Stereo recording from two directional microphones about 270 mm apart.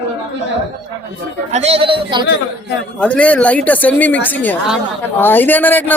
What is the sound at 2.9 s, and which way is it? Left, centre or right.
A woman's voice, centre.